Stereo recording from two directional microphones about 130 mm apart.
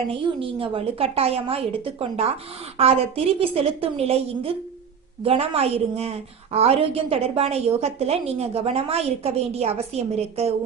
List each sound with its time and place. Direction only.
0.1 s a woman's voice: 45° right (ahead or behind)